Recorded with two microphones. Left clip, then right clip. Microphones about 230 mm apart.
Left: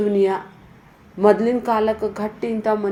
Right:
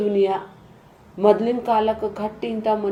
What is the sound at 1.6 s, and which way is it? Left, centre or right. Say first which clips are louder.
Speech: even; left.